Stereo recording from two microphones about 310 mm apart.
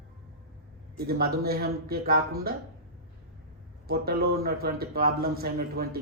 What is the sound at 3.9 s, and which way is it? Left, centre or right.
A man's voice, right.